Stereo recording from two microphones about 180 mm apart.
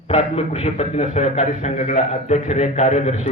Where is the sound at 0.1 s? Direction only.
35° left (ahead or behind).